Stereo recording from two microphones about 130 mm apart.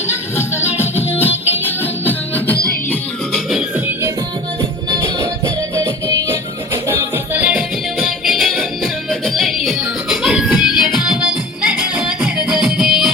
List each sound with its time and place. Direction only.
0.3 s music: 20° left (ahead or behind)
4.9 s music: 25° right (ahead or behind); by 13.1 s 5° right (ahead or behind)